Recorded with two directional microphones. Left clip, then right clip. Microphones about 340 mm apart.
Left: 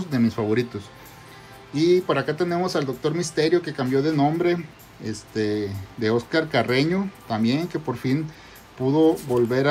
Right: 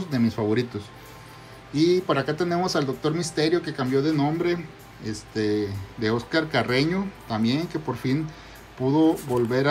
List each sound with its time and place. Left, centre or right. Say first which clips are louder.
0.0 s speech: left 1 dB; centre